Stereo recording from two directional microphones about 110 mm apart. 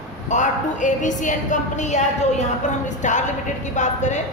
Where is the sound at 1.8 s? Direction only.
90° left.